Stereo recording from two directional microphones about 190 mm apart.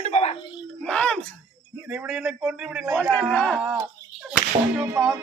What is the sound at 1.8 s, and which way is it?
A man's voice, 5° right (ahead or behind).